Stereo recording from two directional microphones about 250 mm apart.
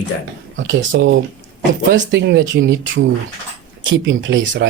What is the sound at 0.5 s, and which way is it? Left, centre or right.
Speech, right.